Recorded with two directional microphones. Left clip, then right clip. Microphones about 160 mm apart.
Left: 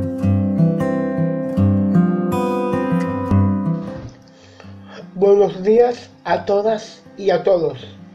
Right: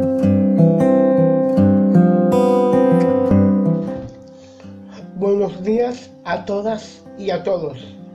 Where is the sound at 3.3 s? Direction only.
30° left (ahead or behind).